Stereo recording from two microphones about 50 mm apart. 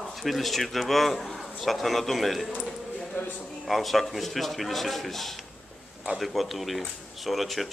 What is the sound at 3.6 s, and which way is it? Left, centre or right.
A man's voice, centre.